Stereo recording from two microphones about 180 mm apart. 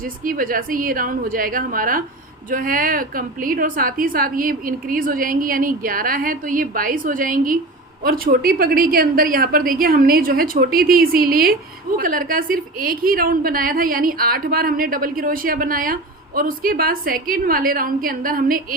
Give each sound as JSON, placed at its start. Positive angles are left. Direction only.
{"t": 0.0, "sound": "a woman's voice", "side_deg": -50}